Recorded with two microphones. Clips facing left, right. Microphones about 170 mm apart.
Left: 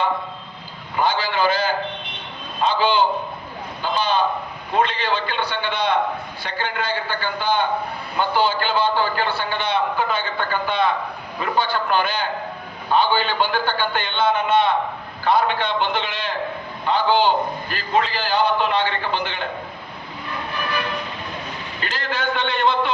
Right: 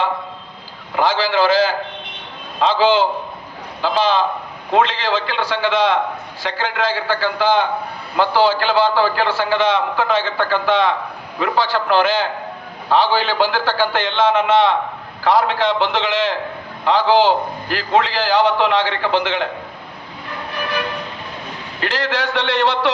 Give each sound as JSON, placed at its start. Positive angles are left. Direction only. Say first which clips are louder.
{"t": 0.9, "sound": "a man's voice", "louder": "right 4 dB", "side_deg": -90}
{"t": 21.8, "sound": "a man's voice", "louder": "right 6 dB", "side_deg": -85}